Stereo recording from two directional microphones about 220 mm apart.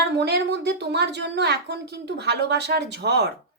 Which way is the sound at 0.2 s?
50° right (ahead or behind).